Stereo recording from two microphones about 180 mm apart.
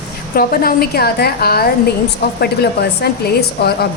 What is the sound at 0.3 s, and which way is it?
A woman's voice, 55° left (ahead or behind).